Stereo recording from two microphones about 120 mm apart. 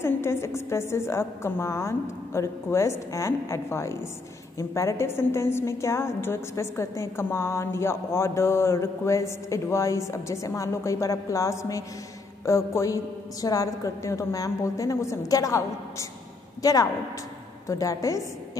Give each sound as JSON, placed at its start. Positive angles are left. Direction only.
{"t": 0.0, "sound": "a woman's voice", "side_deg": 20}